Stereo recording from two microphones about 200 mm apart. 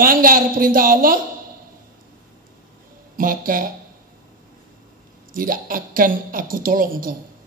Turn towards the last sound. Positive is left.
turn(degrees=-45)  # may be behind; listen again after turning